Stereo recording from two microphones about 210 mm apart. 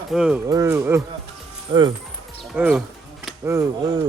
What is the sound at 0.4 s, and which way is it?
Speech, 15° right (ahead or behind).